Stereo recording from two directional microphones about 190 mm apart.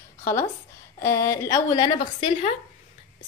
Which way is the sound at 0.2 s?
15° left (ahead or behind).